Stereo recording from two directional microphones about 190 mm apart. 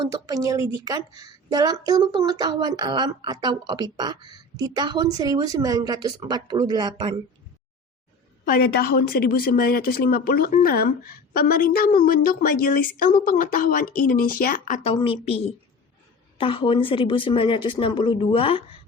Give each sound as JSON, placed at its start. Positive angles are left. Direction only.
{"t": 0.0, "sound": "a woman's voice", "side_deg": -20}
{"t": 8.4, "sound": "a woman's voice", "side_deg": 50}
{"t": 14.8, "sound": "speech", "side_deg": 30}